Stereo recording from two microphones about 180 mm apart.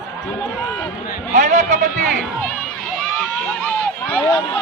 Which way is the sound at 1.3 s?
40° right (ahead or behind).